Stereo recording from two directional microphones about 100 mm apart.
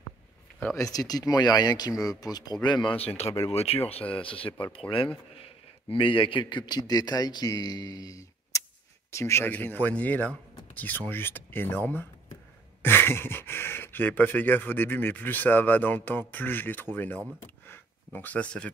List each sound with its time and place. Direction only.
0.7 s speech: 35° left (ahead or behind)
2.6 s a man's voice: 50° left (ahead or behind)
3.3 s speech: 30° left (ahead or behind)
3.5 s speech: 85° left
4.2 s speech: 65° left (ahead or behind)
4.5 s speech: 20° left (ahead or behind)
5.9 s a man's voice: 60° left (ahead or behind); by 17.2 s 20° left (ahead or behind)
17.4 s a sound: 20° left (ahead or behind)